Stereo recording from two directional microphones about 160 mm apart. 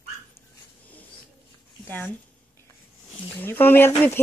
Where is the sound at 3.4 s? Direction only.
15° left (ahead or behind).